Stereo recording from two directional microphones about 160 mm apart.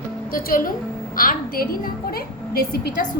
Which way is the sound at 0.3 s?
65° left (ahead or behind).